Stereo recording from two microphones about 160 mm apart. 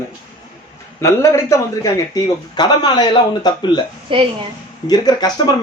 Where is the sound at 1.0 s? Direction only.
20° left (ahead or behind).